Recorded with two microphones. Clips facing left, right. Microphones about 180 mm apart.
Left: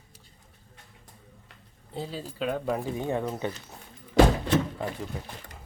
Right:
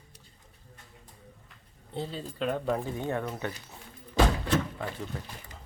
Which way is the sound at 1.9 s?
5° left (ahead or behind).